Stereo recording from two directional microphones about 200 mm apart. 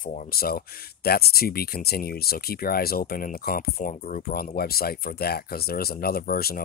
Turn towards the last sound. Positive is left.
turn(degrees=50)  # may be behind; listen again after turning